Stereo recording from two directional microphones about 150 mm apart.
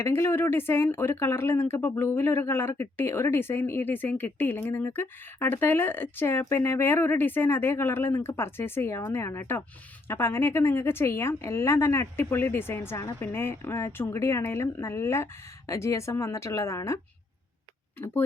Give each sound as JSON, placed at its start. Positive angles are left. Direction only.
{"t": 0.0, "sound": "speech", "side_deg": 15}